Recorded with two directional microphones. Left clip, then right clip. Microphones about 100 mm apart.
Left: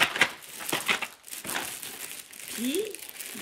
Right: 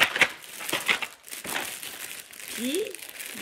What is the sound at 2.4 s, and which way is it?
Crumpling, 45° right (ahead or behind).